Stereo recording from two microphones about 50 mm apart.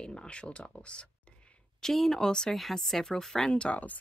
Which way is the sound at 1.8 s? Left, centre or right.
Centre.